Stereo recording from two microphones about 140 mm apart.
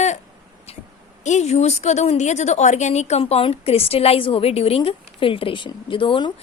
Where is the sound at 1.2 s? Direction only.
55° left (ahead or behind); by 6.3 s 35° left (ahead or behind).